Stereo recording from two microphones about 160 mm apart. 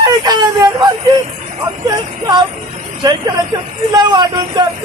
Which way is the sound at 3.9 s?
25° right (ahead or behind).